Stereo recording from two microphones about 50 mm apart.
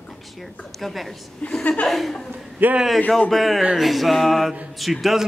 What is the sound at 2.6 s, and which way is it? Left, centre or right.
Speech, right.